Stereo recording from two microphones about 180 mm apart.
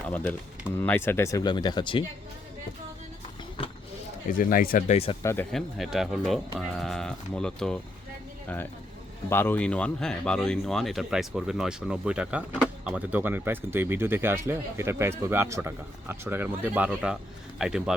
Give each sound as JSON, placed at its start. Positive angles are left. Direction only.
{"t": 0.1, "sound": "speech", "side_deg": 10}
{"t": 4.3, "sound": "speech", "side_deg": 50}
{"t": 5.2, "sound": "speech", "side_deg": 15}
{"t": 5.5, "sound": "speech", "side_deg": 0}
{"t": 9.3, "sound": "speech", "side_deg": 10}